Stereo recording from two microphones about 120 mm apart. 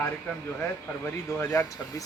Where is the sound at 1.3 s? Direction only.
25° left (ahead or behind).